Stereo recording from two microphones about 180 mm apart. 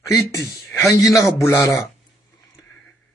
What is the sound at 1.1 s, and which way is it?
Speech, 15° left (ahead or behind).